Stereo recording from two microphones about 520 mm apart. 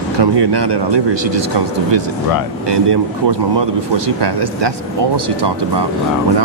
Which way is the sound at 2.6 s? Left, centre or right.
Right.